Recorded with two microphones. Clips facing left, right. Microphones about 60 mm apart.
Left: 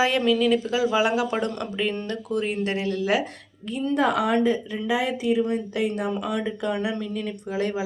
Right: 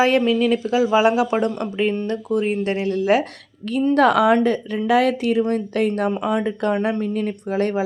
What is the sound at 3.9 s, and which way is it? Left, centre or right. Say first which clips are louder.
A woman's voice: right 6 dB; right.